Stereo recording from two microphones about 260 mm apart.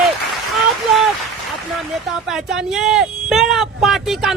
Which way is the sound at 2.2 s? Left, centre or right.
Centre.